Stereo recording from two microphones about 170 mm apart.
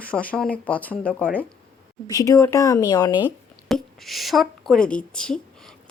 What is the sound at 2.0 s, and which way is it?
Speech, 20° left (ahead or behind).